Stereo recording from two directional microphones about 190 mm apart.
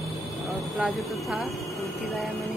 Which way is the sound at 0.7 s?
Centre (ahead or behind).